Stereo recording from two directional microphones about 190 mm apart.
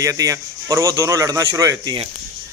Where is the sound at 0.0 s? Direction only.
15° right (ahead or behind).